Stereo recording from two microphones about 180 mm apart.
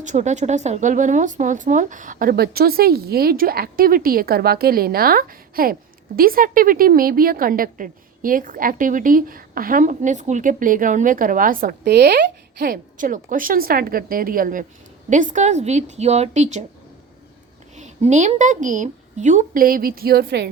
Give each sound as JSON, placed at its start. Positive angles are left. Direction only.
{"t": 0.0, "sound": "a woman's voice", "side_deg": -40}
{"t": 17.7, "sound": "a woman's voice", "side_deg": -40}